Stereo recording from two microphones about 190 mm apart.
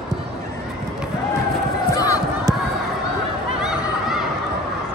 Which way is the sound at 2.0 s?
20° left (ahead or behind).